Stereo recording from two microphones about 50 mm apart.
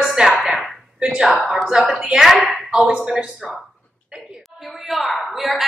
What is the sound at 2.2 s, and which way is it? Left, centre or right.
Speech, centre.